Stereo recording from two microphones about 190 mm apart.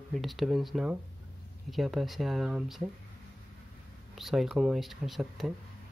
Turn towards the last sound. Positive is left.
turn(degrees=0)  # may be behind; listen again after turning